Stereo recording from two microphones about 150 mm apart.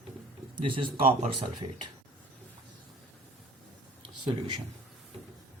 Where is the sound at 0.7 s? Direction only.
35° right (ahead or behind).